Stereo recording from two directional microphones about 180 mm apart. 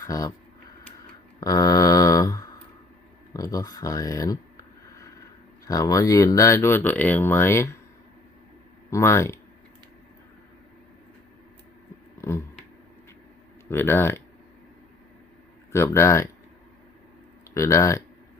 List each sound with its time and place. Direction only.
0.0 s speech: 20° left (ahead or behind)
1.4 s a sound: 20° left (ahead or behind)
5.6 s speech: 20° left (ahead or behind)
8.9 s speech: 15° left (ahead or behind)
12.2 s a sound: 15° left (ahead or behind)
13.7 s speech: 15° left (ahead or behind)
15.7 s speech: 15° left (ahead or behind)
17.5 s speech: 15° left (ahead or behind)